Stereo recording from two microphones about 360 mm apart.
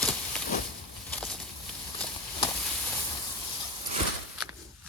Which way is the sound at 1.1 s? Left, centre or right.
Centre.